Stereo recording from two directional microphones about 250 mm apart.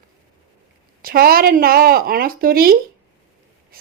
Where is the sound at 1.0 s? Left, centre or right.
Right.